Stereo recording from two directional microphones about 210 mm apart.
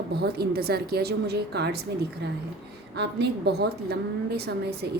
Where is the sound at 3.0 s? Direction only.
55° right (ahead or behind).